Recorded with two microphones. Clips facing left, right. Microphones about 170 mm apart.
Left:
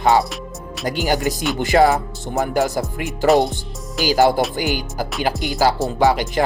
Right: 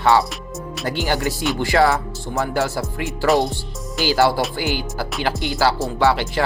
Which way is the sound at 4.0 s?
15° left (ahead or behind).